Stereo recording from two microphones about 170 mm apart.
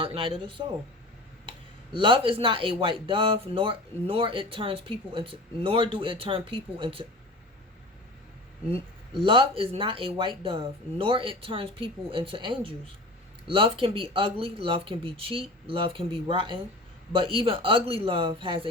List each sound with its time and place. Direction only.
0.0 s speech: 30° right (ahead or behind)
8.7 s speech: 30° right (ahead or behind)